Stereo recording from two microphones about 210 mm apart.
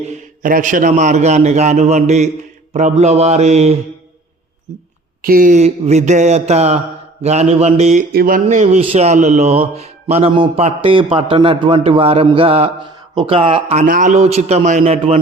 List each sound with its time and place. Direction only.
0.0 s a man's voice: 35° right (ahead or behind)
5.2 s a man's voice: 40° right (ahead or behind)
8.1 s a man's voice: 45° right (ahead or behind)